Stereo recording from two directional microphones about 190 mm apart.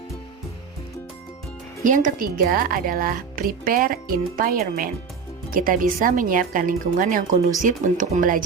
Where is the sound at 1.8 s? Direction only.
45° right (ahead or behind).